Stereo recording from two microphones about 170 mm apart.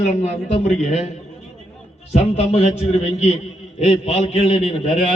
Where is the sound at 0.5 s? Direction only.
40° left (ahead or behind).